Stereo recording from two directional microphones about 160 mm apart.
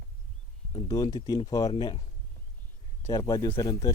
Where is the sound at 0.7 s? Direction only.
20° left (ahead or behind).